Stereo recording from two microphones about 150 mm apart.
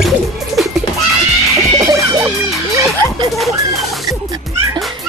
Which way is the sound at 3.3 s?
Centre (ahead or behind).